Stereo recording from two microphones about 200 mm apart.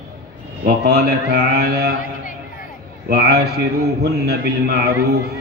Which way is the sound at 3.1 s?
55° right (ahead or behind).